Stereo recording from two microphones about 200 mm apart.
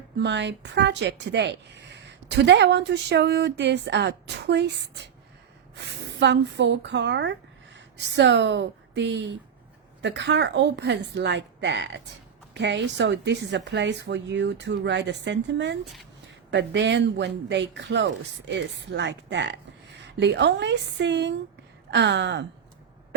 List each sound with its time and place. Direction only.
0.2 s a woman's voice: 60° right (ahead or behind)